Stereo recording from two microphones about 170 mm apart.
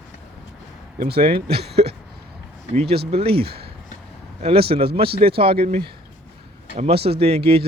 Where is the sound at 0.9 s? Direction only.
65° right (ahead or behind).